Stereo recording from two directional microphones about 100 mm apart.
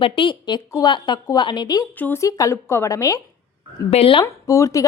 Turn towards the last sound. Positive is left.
turn(degrees=35)  # may be behind; listen again after turning